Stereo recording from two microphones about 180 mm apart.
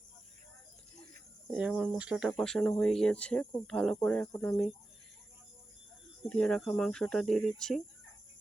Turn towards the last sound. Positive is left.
turn(degrees=5)  # may be behind; listen again after turning